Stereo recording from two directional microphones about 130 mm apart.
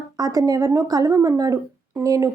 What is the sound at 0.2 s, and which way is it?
Speech, 30° right (ahead or behind).